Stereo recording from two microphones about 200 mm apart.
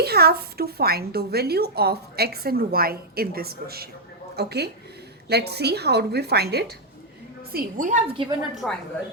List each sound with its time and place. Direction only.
0.0 s a woman's voice: 50° right (ahead or behind)
7.5 s a woman's voice: 40° right (ahead or behind)
8.0 s a woman's voice: 25° right (ahead or behind)
8.6 s a woman's voice: centre (ahead or behind)